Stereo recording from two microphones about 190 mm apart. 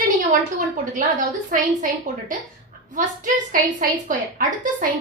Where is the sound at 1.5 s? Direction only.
45° right (ahead or behind).